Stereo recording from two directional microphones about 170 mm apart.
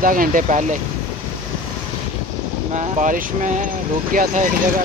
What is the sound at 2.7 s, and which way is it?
Speech, 45° right (ahead or behind).